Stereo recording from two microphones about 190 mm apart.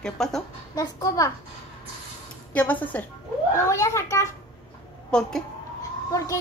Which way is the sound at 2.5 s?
10° left (ahead or behind).